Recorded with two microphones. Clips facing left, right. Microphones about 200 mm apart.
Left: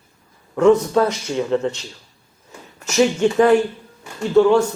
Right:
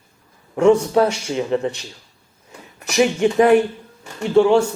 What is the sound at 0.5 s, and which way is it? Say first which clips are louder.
Speech: even; 10° right (ahead or behind).